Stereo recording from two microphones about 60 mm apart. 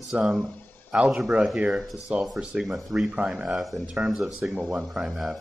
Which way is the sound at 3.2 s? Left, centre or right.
Right.